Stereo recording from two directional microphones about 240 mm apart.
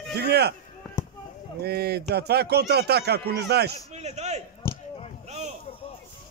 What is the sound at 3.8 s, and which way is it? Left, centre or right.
Speech, right.